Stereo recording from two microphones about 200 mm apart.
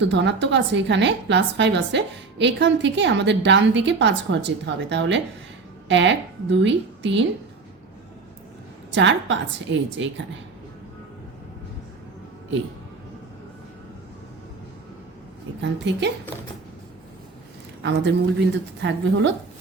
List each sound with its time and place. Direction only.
0.0 s a woman's voice: 65° right (ahead or behind)
8.9 s a woman's voice: 65° right (ahead or behind)
15.6 s a woman's voice: 60° right (ahead or behind)
17.8 s a woman's voice: 60° right (ahead or behind)